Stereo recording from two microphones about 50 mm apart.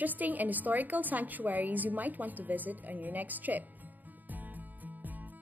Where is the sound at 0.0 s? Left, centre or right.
Right.